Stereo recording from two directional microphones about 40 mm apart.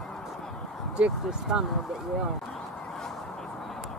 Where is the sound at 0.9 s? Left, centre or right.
Right.